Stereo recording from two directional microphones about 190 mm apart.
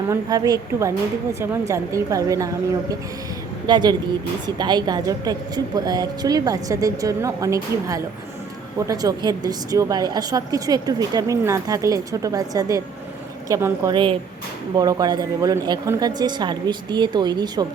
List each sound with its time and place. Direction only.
0.1 s a woman's voice: 20° right (ahead or behind)
3.7 s a woman's voice: 20° right (ahead or behind)
13.9 s a woman's voice: 25° right (ahead or behind)